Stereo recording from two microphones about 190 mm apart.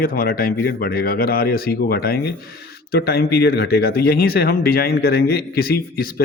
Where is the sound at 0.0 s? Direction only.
50° left (ahead or behind).